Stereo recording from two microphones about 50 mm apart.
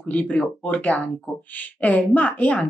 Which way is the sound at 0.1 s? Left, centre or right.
Left.